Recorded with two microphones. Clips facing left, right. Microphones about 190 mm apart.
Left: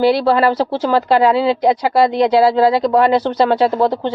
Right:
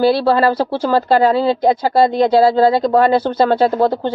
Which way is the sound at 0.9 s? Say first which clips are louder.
Even; 50° right (ahead or behind).